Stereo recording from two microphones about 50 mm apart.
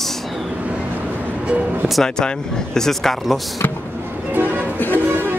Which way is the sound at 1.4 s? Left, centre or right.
Right.